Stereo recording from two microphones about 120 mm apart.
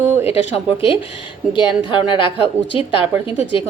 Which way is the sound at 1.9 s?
45° left (ahead or behind).